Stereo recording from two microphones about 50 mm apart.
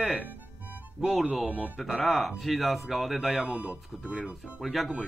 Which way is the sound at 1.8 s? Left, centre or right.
Centre.